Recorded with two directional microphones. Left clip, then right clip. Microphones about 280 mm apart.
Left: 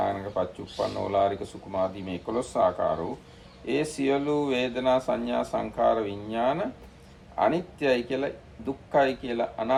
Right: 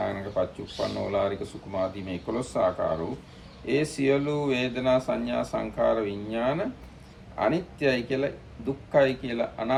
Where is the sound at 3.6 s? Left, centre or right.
Centre.